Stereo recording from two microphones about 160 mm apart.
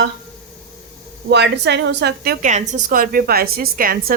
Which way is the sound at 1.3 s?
90° right.